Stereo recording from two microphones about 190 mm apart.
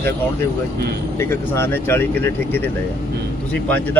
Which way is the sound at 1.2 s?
15° left (ahead or behind).